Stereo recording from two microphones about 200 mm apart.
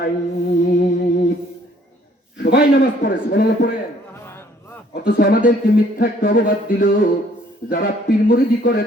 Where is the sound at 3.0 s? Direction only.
40° left (ahead or behind).